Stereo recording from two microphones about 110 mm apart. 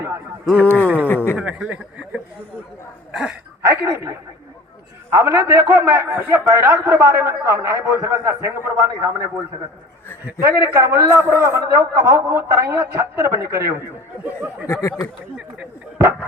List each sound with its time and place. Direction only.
0.6 s a sound: 15° left (ahead or behind)
1.0 s speech: 20° left (ahead or behind)
1.4 s speech: 10° right (ahead or behind)
3.7 s a man's voice: 25° right (ahead or behind)
5.1 s a man's voice: 20° right (ahead or behind)
10.4 s a man's voice: 25° right (ahead or behind)
14.7 s speech: 25° left (ahead or behind)